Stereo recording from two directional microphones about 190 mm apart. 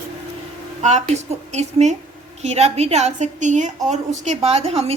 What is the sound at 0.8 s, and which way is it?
A woman's voice, 40° right (ahead or behind).